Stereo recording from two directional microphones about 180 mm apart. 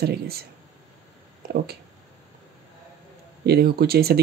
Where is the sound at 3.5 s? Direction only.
60° right (ahead or behind).